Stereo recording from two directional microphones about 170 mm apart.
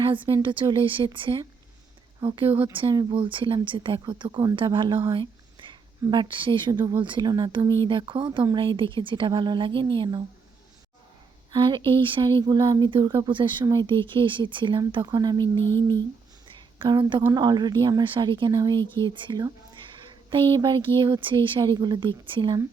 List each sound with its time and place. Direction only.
0.3 s speech: 25° right (ahead or behind)
11.5 s speech: 30° right (ahead or behind)
16.7 s speech: 30° right (ahead or behind)